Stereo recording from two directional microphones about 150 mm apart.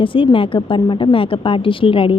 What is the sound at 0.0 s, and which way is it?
A woman's voice, 35° left (ahead or behind).